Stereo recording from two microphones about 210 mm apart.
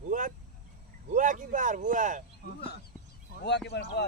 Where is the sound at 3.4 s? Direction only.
55° left (ahead or behind).